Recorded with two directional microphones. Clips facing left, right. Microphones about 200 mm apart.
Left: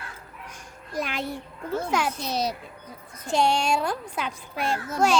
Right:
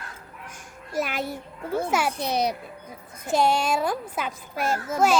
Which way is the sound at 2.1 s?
60° right (ahead or behind).